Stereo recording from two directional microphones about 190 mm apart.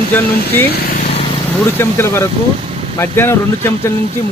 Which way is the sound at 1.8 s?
10° left (ahead or behind).